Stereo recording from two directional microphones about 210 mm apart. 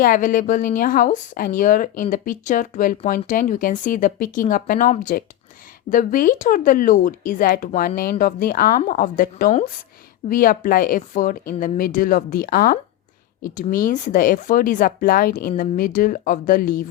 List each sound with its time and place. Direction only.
0.0 s a woman's voice: 40° left (ahead or behind)